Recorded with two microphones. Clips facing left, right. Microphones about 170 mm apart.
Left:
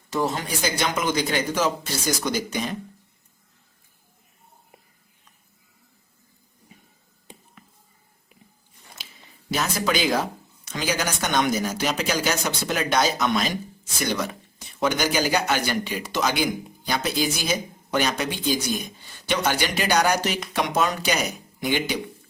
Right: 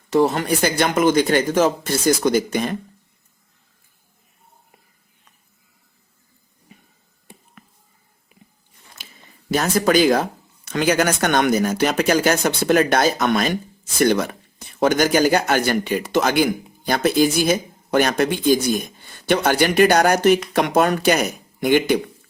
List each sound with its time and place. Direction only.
0.1 s speech: 60° right (ahead or behind)
9.5 s speech: 50° right (ahead or behind)